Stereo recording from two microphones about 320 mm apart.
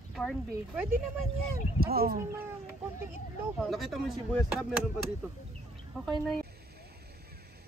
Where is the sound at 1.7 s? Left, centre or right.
Right.